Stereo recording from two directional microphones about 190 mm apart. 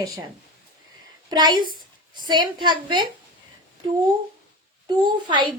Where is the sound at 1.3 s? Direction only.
20° right (ahead or behind).